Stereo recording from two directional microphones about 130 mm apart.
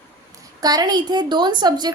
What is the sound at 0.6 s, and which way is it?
A woman's voice, 30° right (ahead or behind).